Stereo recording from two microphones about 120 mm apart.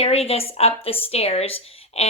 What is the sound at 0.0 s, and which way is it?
Speech, 55° left (ahead or behind).